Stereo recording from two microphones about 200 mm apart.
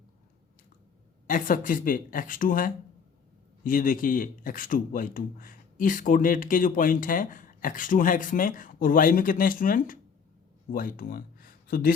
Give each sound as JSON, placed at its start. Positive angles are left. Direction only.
{"t": 1.3, "sound": "speech", "side_deg": 40}